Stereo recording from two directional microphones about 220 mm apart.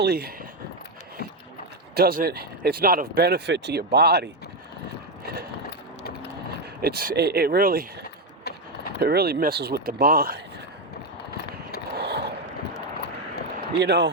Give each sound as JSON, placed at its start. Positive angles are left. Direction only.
{"t": 0.0, "sound": "speech", "side_deg": -45}
{"t": 2.0, "sound": "speech", "side_deg": -45}
{"t": 5.2, "sound": "mechanisms", "side_deg": -45}
{"t": 6.8, "sound": "speech", "side_deg": -45}
{"t": 9.0, "sound": "speech", "side_deg": -45}
{"t": 11.9, "sound": "a sound", "side_deg": -50}
{"t": 13.6, "sound": "speech", "side_deg": -50}